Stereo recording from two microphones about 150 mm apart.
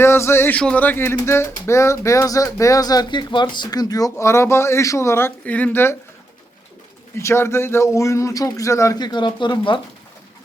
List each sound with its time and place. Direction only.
0.0 s a man's voice: 15° left (ahead or behind)
7.2 s speech: 15° left (ahead or behind); by 9.8 s 30° left (ahead or behind)